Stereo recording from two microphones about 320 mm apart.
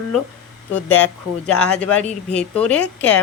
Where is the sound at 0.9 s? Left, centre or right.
Centre.